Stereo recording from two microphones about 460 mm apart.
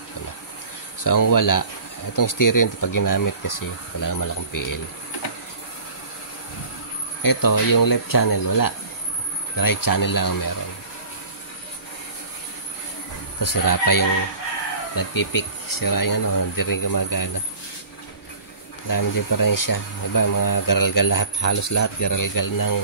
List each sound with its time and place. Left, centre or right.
1.0 s speech: left
7.2 s speech: left
13.4 s speech: left
18.9 s speech: left